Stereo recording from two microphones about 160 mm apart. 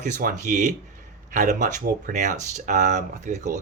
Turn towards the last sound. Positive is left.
turn(degrees=-50)  # may be behind; listen again after turning